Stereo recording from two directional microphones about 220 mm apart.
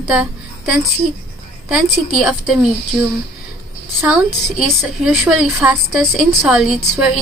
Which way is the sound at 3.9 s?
5° right (ahead or behind).